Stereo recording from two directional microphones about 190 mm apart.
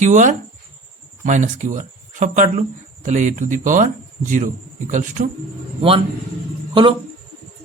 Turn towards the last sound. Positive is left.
turn(degrees=-25)  # may be behind; listen again after turning